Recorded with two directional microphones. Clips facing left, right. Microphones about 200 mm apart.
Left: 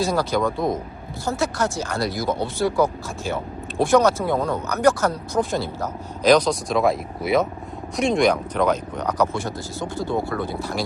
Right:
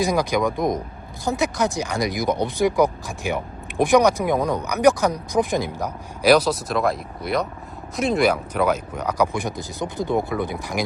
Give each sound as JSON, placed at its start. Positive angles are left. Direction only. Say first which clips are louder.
{"t": 0.0, "sound": "speech", "louder": "right 1 dB", "side_deg": -15}